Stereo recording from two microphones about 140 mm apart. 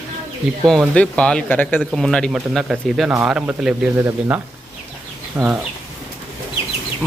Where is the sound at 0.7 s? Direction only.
5° left (ahead or behind); by 4.4 s 15° right (ahead or behind).